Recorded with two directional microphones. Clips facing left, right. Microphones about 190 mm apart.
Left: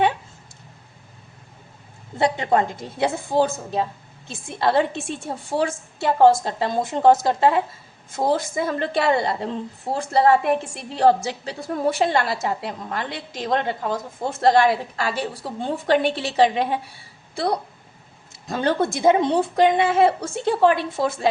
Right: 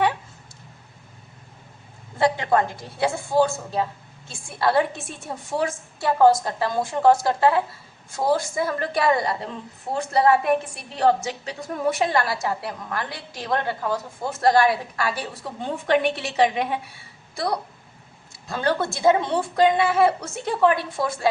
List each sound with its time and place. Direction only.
2.1 s a woman's voice: 20° left (ahead or behind)